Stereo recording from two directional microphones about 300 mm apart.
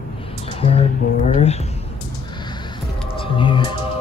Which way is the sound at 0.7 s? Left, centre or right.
Left.